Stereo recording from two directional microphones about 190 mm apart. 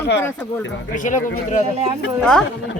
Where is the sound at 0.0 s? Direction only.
65° left (ahead or behind).